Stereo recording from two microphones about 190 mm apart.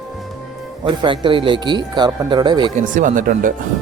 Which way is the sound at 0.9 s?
25° right (ahead or behind).